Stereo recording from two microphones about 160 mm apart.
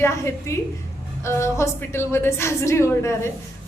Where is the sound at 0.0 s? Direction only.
15° left (ahead or behind).